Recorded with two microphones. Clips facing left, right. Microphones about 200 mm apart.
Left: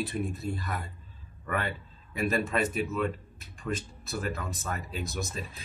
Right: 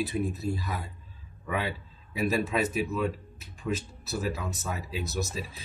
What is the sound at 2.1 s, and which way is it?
Speech, 5° right (ahead or behind).